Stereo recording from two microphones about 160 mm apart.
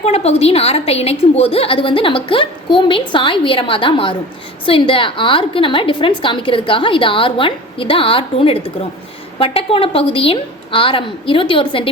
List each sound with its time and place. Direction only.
0.0 s a woman's voice: 40° left (ahead or behind)